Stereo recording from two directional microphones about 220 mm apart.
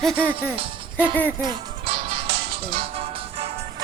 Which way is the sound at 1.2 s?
20° right (ahead or behind).